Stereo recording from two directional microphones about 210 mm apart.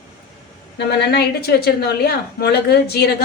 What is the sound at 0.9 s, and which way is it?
A woman's voice, 50° left (ahead or behind).